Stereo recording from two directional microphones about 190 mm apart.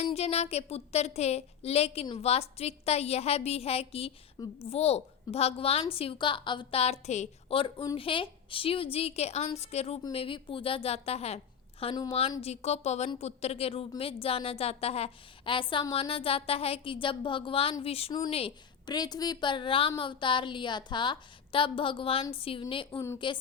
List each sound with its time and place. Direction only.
0.0 s a woman's voice: 35° left (ahead or behind)